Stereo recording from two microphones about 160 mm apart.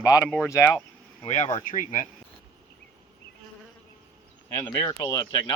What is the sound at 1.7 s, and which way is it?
Speech, 55° left (ahead or behind).